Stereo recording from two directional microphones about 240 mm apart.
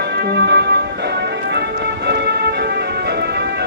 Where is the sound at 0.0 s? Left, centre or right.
Right.